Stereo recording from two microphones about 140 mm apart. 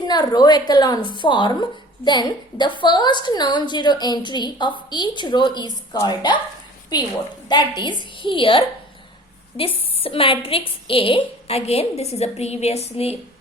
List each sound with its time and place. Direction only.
0.1 s a woman's voice: 30° left (ahead or behind); by 13.1 s 45° left (ahead or behind)